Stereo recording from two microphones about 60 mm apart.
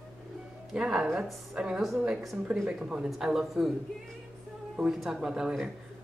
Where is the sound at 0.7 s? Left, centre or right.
Centre.